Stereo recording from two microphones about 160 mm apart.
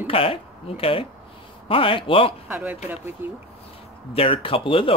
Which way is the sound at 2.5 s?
10° right (ahead or behind).